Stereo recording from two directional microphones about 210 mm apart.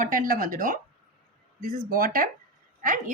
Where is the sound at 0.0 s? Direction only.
40° right (ahead or behind).